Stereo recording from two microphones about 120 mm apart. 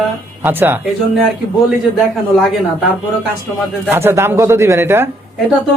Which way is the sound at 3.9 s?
20° right (ahead or behind).